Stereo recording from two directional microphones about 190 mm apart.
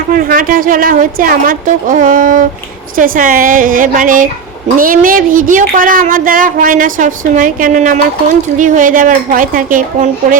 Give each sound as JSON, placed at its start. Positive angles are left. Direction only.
{"t": 0.1, "sound": "speech", "side_deg": -45}